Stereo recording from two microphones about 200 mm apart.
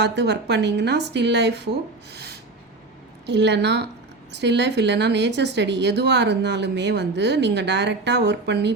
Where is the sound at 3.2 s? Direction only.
60° right (ahead or behind).